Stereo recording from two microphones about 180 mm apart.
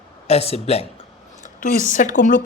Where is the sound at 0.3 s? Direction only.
35° left (ahead or behind).